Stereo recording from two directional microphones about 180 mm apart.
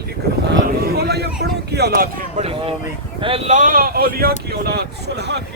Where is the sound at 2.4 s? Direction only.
30° right (ahead or behind).